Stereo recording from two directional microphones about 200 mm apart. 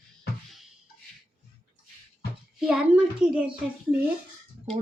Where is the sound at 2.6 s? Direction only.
5° right (ahead or behind).